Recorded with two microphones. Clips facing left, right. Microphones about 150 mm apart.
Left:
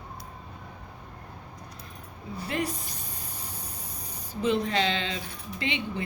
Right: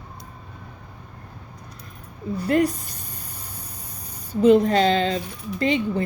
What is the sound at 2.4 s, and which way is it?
Speech, 45° right (ahead or behind).